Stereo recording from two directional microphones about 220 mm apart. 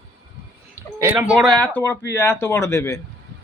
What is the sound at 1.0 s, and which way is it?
Speech, 10° right (ahead or behind).